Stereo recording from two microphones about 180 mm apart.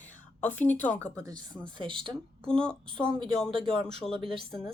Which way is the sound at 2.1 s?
5° left (ahead or behind).